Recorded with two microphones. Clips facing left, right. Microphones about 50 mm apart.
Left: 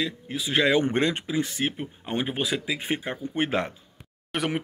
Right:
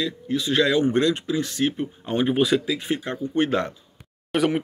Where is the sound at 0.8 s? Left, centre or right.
Left; by 2.6 s centre.